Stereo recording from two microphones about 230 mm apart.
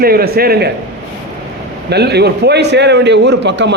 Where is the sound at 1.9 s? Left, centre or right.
Right.